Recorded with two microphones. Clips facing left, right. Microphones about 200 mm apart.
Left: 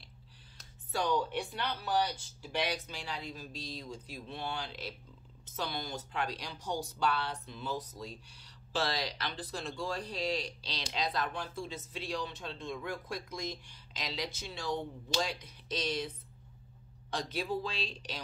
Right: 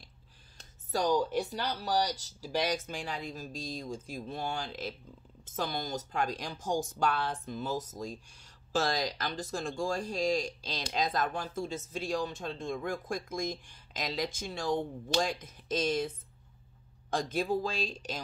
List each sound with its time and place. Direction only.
0.9 s speech: 40° right (ahead or behind)
17.1 s speech: 45° right (ahead or behind)